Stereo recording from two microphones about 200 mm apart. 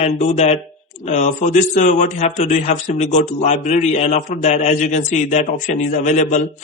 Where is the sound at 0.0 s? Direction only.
35° left (ahead or behind).